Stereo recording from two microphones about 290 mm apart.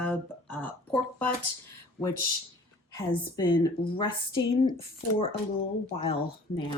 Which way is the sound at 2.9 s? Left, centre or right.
Centre.